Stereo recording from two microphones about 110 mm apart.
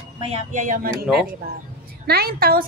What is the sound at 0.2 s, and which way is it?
Speech, 70° right (ahead or behind).